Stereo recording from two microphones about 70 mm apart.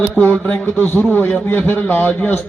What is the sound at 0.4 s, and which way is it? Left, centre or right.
A man's voice, left.